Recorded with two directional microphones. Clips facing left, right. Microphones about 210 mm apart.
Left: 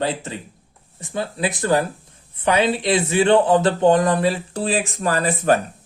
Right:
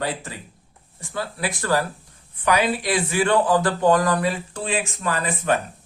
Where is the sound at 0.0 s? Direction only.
25° left (ahead or behind).